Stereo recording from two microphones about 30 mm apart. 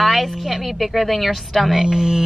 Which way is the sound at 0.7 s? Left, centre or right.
Centre.